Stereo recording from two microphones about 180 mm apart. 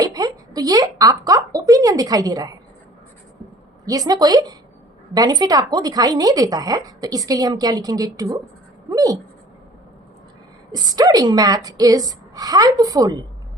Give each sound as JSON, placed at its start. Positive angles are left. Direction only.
{"t": 0.0, "sound": "a woman's voice", "side_deg": -20}
{"t": 3.8, "sound": "a woman's voice", "side_deg": -20}
{"t": 10.7, "sound": "a woman's voice", "side_deg": -20}